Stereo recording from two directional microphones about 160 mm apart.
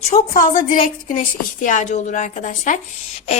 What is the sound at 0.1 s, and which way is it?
A woman's voice, 60° left (ahead or behind).